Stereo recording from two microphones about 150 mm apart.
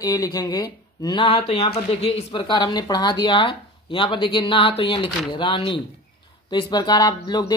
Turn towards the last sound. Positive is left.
turn(degrees=30)  # may be behind; listen again after turning